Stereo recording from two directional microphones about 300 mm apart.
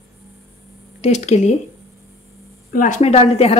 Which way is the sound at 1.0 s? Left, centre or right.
Left.